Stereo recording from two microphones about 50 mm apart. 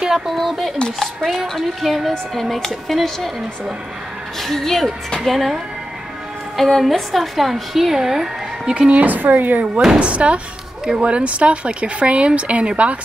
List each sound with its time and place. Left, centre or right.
0.0 s a sound: centre
0.4 s a woman's voice: centre
8.7 s speech: centre
9.0 s speech: right